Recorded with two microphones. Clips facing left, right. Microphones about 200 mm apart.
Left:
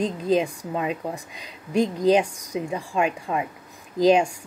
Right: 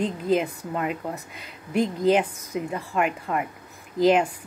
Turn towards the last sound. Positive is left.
turn(degrees=15)  # may be behind; listen again after turning